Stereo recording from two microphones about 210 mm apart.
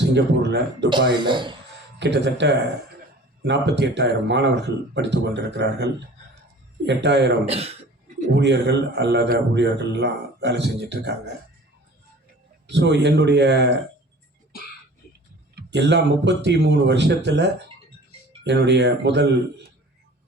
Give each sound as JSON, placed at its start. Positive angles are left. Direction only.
{"t": 0.0, "sound": "a man's voice", "side_deg": -55}
{"t": 1.3, "sound": "speech", "side_deg": -20}
{"t": 2.0, "sound": "a man's voice", "side_deg": -55}
{"t": 7.4, "sound": "speech", "side_deg": -30}
{"t": 8.4, "sound": "a man's voice", "side_deg": -55}
{"t": 12.6, "sound": "a man's voice", "side_deg": -55}
{"t": 15.5, "sound": "a man's voice", "side_deg": -55}